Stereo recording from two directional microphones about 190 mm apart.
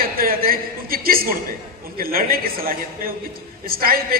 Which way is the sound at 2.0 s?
50° right (ahead or behind).